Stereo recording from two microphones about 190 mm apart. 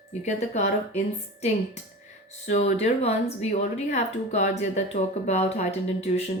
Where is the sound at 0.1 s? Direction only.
35° left (ahead or behind).